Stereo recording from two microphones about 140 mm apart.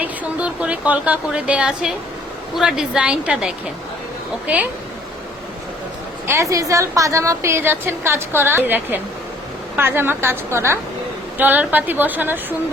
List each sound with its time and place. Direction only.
0.0 s a woman's voice: 10° right (ahead or behind)
6.2 s a woman's voice: 20° right (ahead or behind)